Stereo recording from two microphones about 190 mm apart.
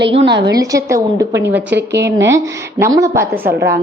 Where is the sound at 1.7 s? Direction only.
65° right (ahead or behind).